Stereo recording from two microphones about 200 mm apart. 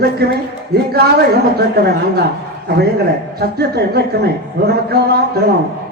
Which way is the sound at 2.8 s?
55° right (ahead or behind).